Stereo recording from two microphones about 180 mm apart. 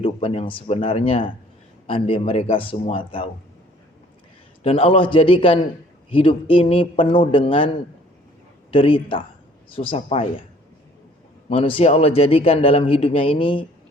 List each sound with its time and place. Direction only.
0.0 s a man's voice: 30° left (ahead or behind)
4.6 s a man's voice: 30° left (ahead or behind)
11.4 s a man's voice: 30° left (ahead or behind)